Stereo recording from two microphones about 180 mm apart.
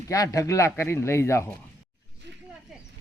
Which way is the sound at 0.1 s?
20° left (ahead or behind).